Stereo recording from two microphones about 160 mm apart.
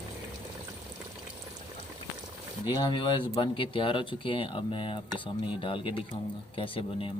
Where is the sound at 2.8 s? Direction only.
30° left (ahead or behind).